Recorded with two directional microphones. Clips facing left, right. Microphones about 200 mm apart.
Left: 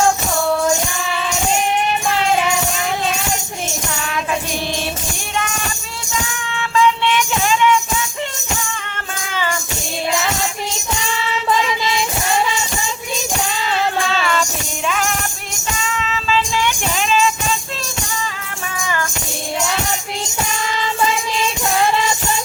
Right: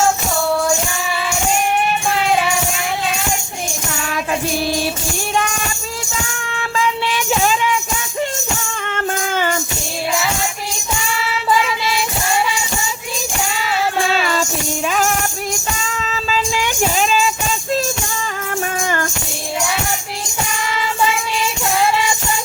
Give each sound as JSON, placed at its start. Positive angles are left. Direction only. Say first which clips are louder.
{"t": 6.5, "sound": "music", "louder": "left 4 dB", "side_deg": -40}
{"t": 9.3, "sound": "music", "louder": "right 1 dB", "side_deg": -50}
{"t": 14.8, "sound": "music", "louder": "right 2 dB", "side_deg": -40}
{"t": 18.8, "sound": "music", "louder": "left 1 dB", "side_deg": -45}